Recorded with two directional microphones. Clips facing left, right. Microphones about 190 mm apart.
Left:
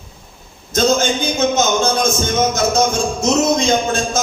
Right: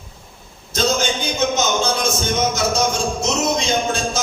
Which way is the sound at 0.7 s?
50° left (ahead or behind).